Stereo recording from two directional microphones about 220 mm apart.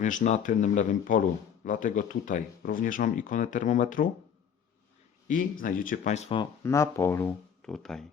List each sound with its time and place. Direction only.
0.0 s speech: 35° left (ahead or behind)
5.3 s speech: 40° left (ahead or behind); by 8.0 s centre (ahead or behind)